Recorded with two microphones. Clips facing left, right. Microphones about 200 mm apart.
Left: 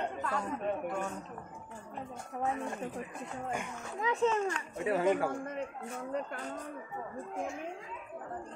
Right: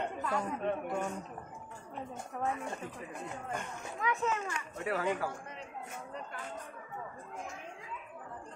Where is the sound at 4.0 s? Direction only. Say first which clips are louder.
Left 5 dB; 30° left (ahead or behind).